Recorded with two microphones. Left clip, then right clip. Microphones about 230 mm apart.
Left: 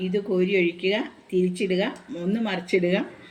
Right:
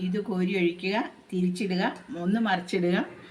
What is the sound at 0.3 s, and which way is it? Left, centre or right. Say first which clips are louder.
A woman's voice: left 5 dB; centre.